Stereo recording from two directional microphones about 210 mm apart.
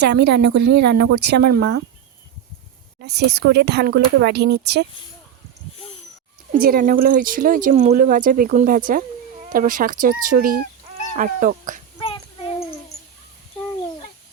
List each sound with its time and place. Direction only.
0.0 s speech: 55° right (ahead or behind)
3.0 s speech: 50° right (ahead or behind)
5.7 s a sound: 25° left (ahead or behind)
6.5 s speech: 45° right (ahead or behind)
11.9 s child singing: 25° left (ahead or behind)